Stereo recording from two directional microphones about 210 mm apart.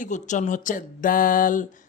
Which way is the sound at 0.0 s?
35° left (ahead or behind).